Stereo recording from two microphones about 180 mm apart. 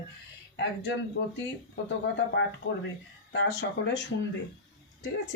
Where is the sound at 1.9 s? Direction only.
80° left.